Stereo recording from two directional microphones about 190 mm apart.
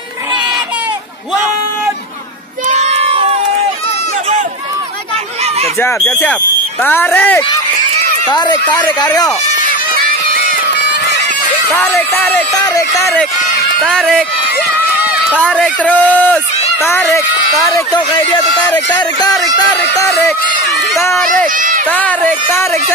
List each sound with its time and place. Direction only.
2.7 s crowd: 35° right (ahead or behind)
5.9 s a man's voice: 5° left (ahead or behind)
8.3 s speech: 20° left (ahead or behind)
11.7 s a man's voice: 10° left (ahead or behind)
13.8 s speech: 5° left (ahead or behind)
15.4 s a man's voice: 5° left (ahead or behind)
19.1 s a man's voice: 20° left (ahead or behind)
20.9 s a sound: 15° left (ahead or behind)
21.5 s run: 45° right (ahead or behind)
21.8 s a man's voice: 10° left (ahead or behind)